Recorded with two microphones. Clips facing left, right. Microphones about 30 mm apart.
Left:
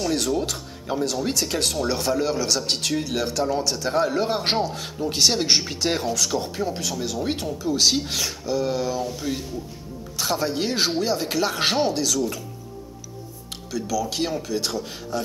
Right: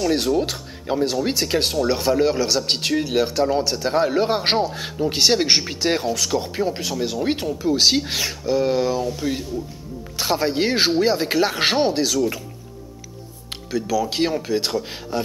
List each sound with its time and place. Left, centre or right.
0.4 s speech: right
10.1 s speech: right
13.5 s speech: right